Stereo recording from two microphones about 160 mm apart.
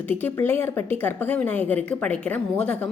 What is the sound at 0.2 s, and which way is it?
A woman's voice, 15° left (ahead or behind).